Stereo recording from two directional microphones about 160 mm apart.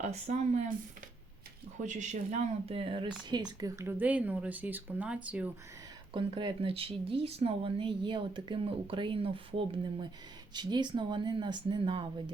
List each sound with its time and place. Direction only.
0.0 s speech: 45° right (ahead or behind)
1.8 s speech: 50° right (ahead or behind)
3.6 s speech: 15° right (ahead or behind)
6.1 s speech: 30° right (ahead or behind)